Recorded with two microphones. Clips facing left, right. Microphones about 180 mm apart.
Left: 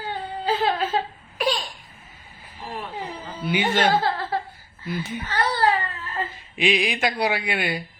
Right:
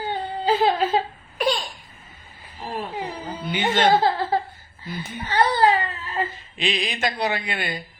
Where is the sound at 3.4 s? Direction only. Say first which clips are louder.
Left 5 dB; 10° left (ahead or behind).